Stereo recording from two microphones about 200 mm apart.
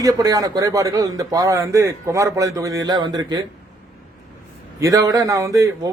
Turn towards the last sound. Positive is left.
turn(degrees=-15)  # may be behind; listen again after turning